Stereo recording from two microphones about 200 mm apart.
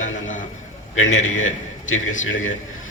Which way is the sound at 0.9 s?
80° left.